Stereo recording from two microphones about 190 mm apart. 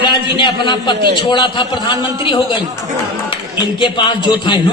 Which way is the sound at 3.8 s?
25° left (ahead or behind).